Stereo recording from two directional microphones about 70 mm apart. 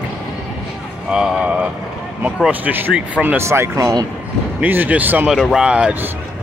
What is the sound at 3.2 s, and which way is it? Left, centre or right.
Speech, right.